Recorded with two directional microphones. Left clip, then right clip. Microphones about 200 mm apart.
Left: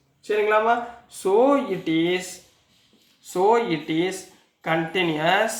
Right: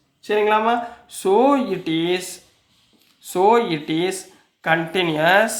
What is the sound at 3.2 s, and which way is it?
Speech, 40° right (ahead or behind).